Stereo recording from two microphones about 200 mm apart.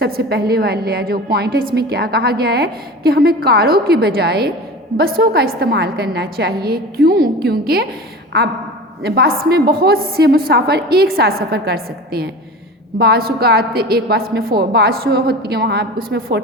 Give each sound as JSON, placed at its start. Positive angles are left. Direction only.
{"t": 0.0, "sound": "a woman's voice", "side_deg": -50}
{"t": 9.0, "sound": "a woman's voice", "side_deg": -50}